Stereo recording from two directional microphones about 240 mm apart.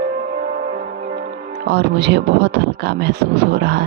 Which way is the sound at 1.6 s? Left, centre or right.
Right.